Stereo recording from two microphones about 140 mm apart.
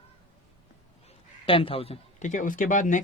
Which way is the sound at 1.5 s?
40° left (ahead or behind).